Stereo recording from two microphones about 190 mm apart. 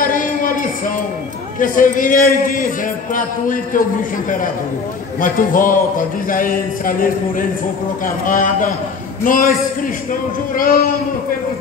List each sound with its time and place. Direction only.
0.0 s a sound: 45° left (ahead or behind)
1.6 s speech: 45° left (ahead or behind)
5.2 s speech: 45° left (ahead or behind)